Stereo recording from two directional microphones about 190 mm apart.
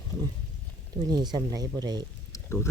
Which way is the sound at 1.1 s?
20° right (ahead or behind).